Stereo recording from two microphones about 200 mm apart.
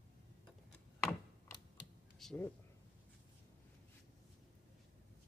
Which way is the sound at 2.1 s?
Centre (ahead or behind).